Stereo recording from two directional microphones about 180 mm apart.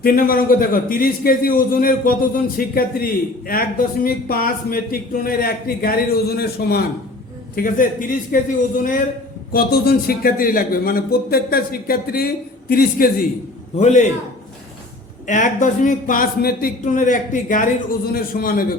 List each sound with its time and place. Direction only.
0.0 s a man's voice: 55° left (ahead or behind)
9.5 s a man's voice: 55° left (ahead or behind)
13.7 s a man's voice: 40° left (ahead or behind)
15.3 s a man's voice: 45° left (ahead or behind)